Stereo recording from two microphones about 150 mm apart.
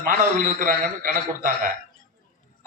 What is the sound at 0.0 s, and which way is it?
A man's voice, 65° right (ahead or behind).